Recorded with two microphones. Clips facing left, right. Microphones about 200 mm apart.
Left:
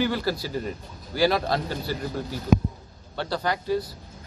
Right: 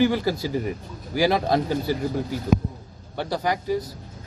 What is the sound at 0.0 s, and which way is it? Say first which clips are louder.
Speech: right 4 dB; 15° right (ahead or behind).